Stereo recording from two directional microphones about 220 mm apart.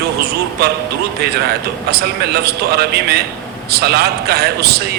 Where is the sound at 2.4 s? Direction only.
45° right (ahead or behind).